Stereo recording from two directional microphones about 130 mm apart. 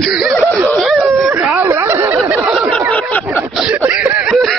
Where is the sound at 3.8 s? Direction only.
10° right (ahead or behind).